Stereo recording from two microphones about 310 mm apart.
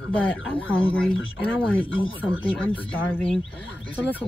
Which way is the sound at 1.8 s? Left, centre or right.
Centre.